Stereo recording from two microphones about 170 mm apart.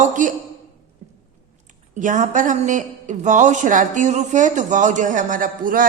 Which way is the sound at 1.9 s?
50° right (ahead or behind).